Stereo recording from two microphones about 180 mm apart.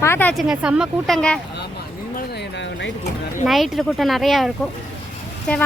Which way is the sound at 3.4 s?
Centre (ahead or behind).